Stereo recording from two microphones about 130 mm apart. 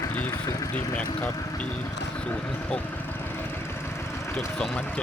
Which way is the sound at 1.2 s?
25° left (ahead or behind).